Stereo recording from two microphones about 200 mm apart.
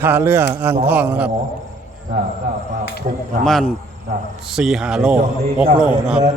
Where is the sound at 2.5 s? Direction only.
55° right (ahead or behind).